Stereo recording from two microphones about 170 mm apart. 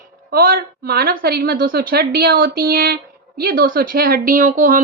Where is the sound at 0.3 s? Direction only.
60° right (ahead or behind).